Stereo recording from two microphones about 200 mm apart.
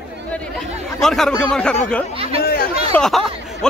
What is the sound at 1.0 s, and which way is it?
Speech, centre (ahead or behind).